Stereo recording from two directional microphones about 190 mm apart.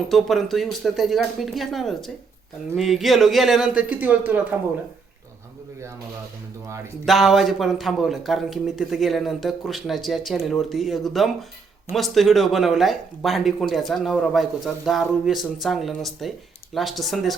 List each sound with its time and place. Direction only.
0.1 s speech: centre (ahead or behind)
7.0 s speech: centre (ahead or behind)